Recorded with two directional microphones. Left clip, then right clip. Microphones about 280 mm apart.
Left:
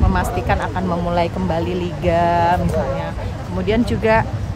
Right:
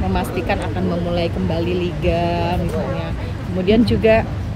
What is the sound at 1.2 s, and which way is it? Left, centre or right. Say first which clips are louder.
Speech: even; left.